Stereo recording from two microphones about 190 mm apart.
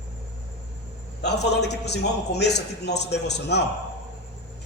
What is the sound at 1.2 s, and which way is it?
A man's voice, 60° left (ahead or behind).